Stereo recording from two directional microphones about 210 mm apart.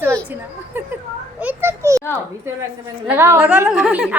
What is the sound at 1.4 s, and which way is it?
Speech, 10° right (ahead or behind).